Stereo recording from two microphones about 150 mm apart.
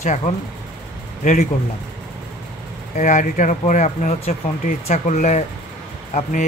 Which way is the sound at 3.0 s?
55° left (ahead or behind).